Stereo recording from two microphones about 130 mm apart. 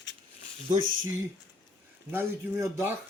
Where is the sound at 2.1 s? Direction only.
25° right (ahead or behind).